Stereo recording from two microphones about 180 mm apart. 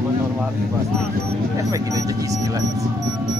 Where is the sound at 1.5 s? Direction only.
20° right (ahead or behind).